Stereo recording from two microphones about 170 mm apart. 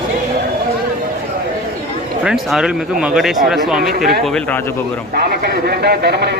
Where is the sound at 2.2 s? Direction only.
Centre (ahead or behind).